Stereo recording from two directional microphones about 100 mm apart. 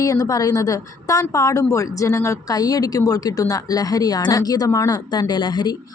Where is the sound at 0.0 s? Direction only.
35° left (ahead or behind).